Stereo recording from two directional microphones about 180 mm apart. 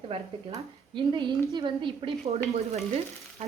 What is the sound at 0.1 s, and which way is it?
A woman's voice, 30° right (ahead or behind).